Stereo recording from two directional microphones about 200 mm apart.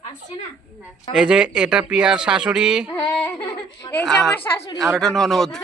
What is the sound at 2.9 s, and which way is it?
Speech, 20° left (ahead or behind).